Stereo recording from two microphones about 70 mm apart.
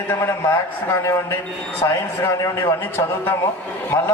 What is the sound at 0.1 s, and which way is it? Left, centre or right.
A man's voice, left.